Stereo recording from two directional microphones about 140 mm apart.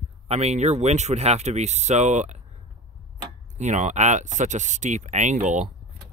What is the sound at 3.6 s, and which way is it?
Speech, 60° right (ahead or behind).